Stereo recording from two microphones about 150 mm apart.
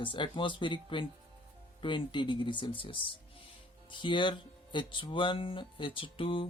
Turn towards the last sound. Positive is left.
turn(degrees=35)  # may be behind; listen again after turning